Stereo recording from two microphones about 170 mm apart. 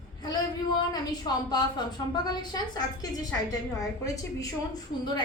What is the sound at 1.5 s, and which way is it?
A woman's voice, 25° left (ahead or behind).